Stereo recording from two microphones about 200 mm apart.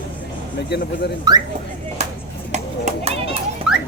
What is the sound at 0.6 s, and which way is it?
Speech, 55° left (ahead or behind).